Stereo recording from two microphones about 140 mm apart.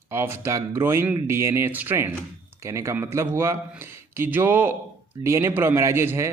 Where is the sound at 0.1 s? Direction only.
15° right (ahead or behind).